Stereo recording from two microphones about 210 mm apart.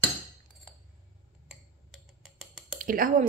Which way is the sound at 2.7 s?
40° right (ahead or behind).